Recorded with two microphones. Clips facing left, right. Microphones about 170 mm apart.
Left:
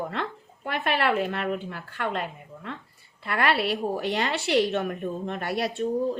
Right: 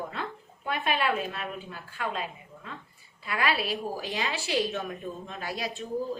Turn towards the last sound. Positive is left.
turn(degrees=65)  # may be behind; listen again after turning